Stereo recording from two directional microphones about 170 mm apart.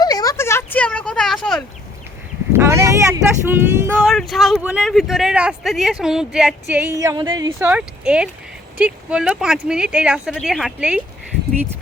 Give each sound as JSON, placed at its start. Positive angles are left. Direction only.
{"t": 0.0, "sound": "a sound", "side_deg": 20}
{"t": 2.5, "sound": "speech", "side_deg": -15}
{"t": 4.1, "sound": "speech", "side_deg": 0}
{"t": 6.9, "sound": "speech", "side_deg": -20}
{"t": 7.7, "sound": "speech", "side_deg": -5}